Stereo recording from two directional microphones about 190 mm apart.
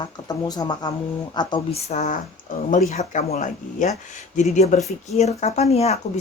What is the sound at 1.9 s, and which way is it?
A woman's voice, 40° left (ahead or behind).